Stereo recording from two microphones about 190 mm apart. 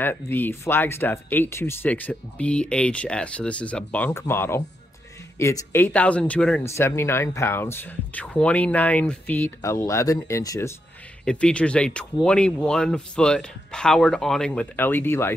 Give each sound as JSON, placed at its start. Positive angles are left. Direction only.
{"t": 0.0, "sound": "speech", "side_deg": 10}
{"t": 11.2, "sound": "speech", "side_deg": 5}